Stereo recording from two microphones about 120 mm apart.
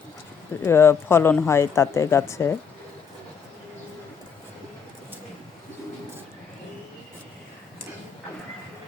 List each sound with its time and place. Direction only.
0.6 s speech: 20° left (ahead or behind)